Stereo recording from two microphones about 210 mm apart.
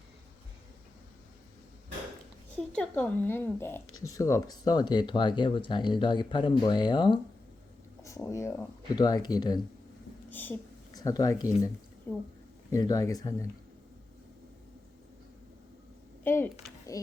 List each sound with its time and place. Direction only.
2.6 s speech: 5° left (ahead or behind)
3.8 s speech: 80° left
4.1 s speech: 15° left (ahead or behind)
10.2 s speech: 10° left (ahead or behind)
16.2 s speech: 10° left (ahead or behind)